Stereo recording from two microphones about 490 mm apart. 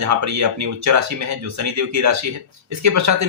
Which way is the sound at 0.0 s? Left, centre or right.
Right.